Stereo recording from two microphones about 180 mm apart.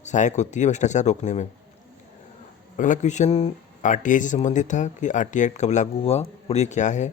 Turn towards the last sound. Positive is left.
turn(degrees=40)  # may be behind; listen again after turning